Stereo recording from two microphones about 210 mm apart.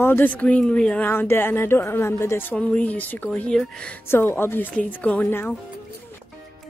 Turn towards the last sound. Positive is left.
turn(degrees=10)  # may be behind; listen again after turning